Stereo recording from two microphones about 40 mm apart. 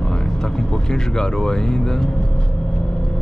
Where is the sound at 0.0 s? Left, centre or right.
Centre.